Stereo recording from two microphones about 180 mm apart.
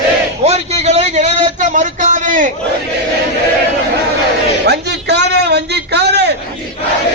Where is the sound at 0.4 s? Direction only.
35° right (ahead or behind).